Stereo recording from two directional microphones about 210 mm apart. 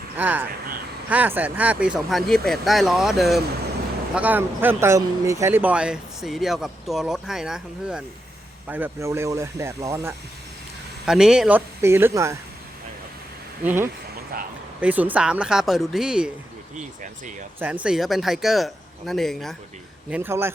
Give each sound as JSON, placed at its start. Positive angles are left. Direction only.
{"t": 0.2, "sound": "speech", "side_deg": -10}
{"t": 13.7, "sound": "speech", "side_deg": -10}
{"t": 14.3, "sound": "speech", "side_deg": -40}
{"t": 14.8, "sound": "speech", "side_deg": -5}
{"t": 16.7, "sound": "speech", "side_deg": -35}
{"t": 17.8, "sound": "speech", "side_deg": 0}